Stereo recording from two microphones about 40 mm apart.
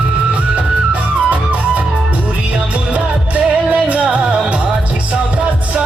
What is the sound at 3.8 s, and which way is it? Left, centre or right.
Music, right.